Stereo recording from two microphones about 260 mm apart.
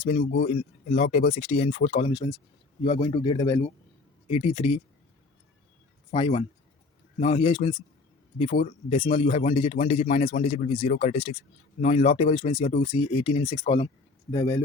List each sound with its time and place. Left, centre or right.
0.0 s a man's voice: left; by 3.6 s centre
4.3 s a man's voice: left
6.1 s a man's voice: left